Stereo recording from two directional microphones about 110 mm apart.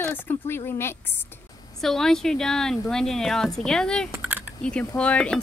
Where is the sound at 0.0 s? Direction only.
20° left (ahead or behind).